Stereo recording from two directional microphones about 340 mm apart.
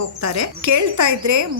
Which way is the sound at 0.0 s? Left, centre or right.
Right.